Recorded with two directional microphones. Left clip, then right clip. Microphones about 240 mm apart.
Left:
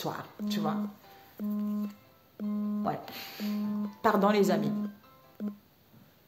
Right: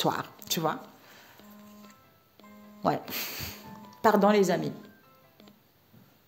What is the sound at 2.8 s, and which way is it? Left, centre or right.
Speech, right.